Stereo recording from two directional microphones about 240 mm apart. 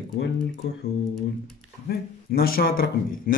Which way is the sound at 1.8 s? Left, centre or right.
Left.